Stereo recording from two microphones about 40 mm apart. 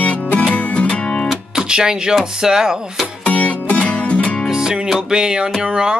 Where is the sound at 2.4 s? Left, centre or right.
Centre.